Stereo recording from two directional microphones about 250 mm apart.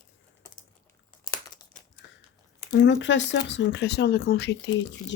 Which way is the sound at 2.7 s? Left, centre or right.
Left.